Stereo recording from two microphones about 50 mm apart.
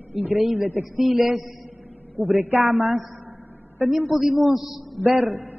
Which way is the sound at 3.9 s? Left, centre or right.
Centre.